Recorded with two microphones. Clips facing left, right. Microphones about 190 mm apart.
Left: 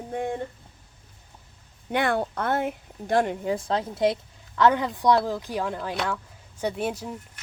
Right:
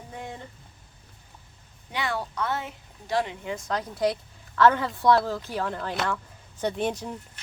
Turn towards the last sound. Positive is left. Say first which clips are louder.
# even
turn(degrees=5)  # may be behind; listen again after turning